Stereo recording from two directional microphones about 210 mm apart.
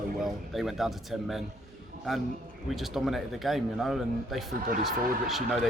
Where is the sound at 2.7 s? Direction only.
Centre (ahead or behind).